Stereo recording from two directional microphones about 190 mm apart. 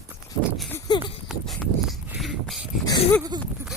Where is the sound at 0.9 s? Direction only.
25° left (ahead or behind).